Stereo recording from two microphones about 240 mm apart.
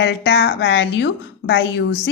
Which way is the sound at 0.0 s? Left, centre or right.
Left.